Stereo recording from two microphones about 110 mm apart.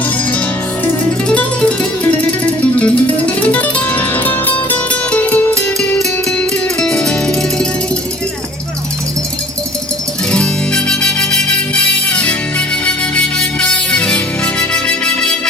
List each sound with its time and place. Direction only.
0.9 s music: 10° left (ahead or behind)
10.3 s music: 10° left (ahead or behind)